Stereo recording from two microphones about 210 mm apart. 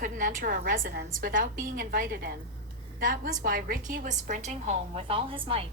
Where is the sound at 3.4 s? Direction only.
45° right (ahead or behind); by 5.6 s 25° right (ahead or behind).